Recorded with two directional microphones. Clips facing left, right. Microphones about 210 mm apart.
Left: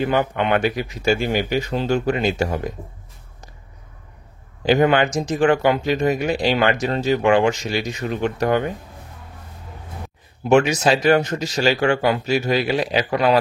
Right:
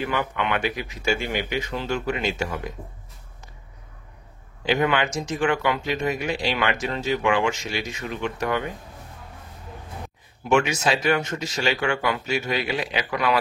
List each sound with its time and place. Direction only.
0.0 s speech: 35° left (ahead or behind)
4.6 s speech: 40° left (ahead or behind)
10.4 s speech: 35° left (ahead or behind)